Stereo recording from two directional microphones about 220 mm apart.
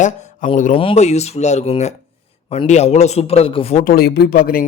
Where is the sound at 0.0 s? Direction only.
35° left (ahead or behind).